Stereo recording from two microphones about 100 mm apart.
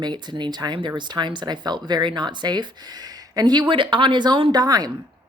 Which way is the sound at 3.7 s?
55° right (ahead or behind).